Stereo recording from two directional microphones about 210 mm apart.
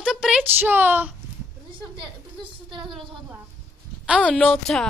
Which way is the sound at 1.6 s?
25° right (ahead or behind).